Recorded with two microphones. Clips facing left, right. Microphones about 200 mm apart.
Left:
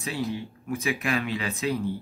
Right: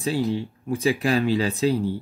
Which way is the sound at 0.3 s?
30° right (ahead or behind).